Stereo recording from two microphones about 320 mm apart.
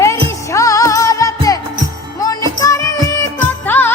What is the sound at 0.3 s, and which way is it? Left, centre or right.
Music, centre.